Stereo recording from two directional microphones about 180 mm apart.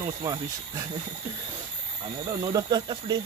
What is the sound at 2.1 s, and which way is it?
Speech, 25° right (ahead or behind).